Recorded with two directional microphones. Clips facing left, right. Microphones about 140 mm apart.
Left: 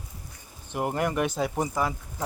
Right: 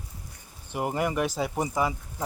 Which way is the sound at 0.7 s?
5° right (ahead or behind).